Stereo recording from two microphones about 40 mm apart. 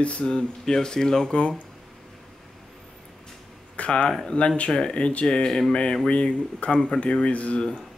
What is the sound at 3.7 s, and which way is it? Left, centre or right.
Speech, left.